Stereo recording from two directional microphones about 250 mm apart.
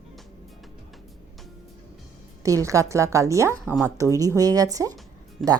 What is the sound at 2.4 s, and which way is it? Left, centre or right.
Speech, centre.